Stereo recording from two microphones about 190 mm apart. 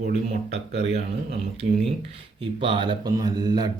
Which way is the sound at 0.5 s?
35° right (ahead or behind).